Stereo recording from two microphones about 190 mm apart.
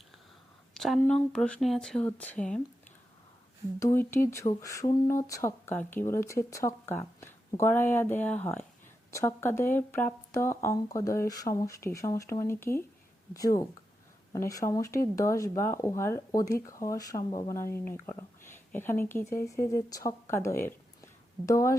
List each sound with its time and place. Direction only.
0.7 s speech: centre (ahead or behind)
4.3 s speech: 15° left (ahead or behind)